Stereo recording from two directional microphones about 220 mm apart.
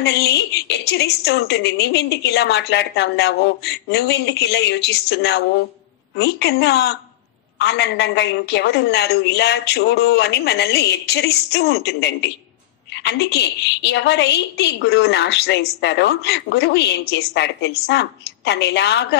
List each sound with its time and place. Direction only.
0.0 s a woman's voice: 50° left (ahead or behind)